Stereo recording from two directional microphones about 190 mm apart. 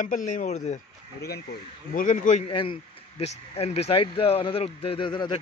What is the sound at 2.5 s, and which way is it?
Speech, 25° left (ahead or behind).